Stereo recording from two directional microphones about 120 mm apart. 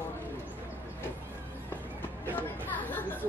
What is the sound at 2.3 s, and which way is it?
Chatter, 15° left (ahead or behind).